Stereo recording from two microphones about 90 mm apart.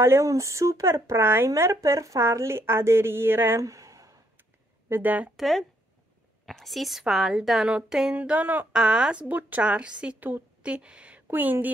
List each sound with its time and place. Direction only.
0.0 s speech: 30° right (ahead or behind)
3.6 s a sound: 35° right (ahead or behind)
4.8 s speech: 20° right (ahead or behind)
5.4 s a woman's voice: centre (ahead or behind)
10.3 s a sound: 15° right (ahead or behind)
11.2 s speech: 25° right (ahead or behind)